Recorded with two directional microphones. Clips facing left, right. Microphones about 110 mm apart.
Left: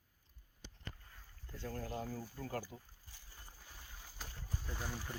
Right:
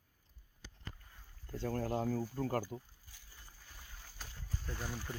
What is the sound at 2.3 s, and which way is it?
Speech, 45° right (ahead or behind).